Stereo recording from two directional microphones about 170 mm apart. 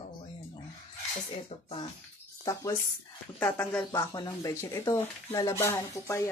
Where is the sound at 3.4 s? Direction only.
10° left (ahead or behind).